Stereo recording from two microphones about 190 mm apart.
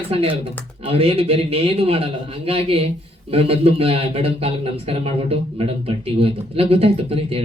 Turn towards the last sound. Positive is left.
turn(degrees=-30)  # may be behind; listen again after turning